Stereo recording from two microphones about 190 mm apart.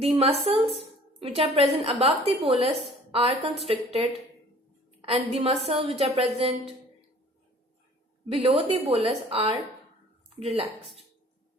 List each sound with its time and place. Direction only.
0.0 s a woman's voice: 30° right (ahead or behind)
8.3 s a woman's voice: 30° right (ahead or behind)